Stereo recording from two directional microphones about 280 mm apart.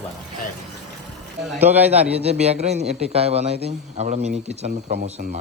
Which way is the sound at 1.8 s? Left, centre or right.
Right.